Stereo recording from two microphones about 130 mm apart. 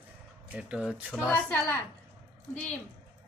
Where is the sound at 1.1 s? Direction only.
5° left (ahead or behind).